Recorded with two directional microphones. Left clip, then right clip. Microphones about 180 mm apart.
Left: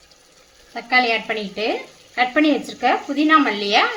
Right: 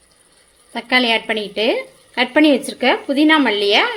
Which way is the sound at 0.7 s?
50° right (ahead or behind).